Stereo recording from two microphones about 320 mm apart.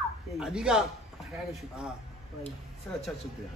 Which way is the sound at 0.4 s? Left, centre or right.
Centre.